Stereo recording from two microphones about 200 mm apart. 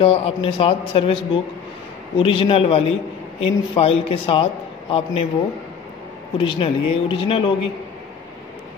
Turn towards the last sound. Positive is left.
turn(degrees=25)  # may be behind; listen again after turning